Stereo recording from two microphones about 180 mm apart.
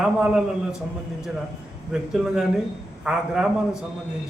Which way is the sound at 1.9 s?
5° right (ahead or behind).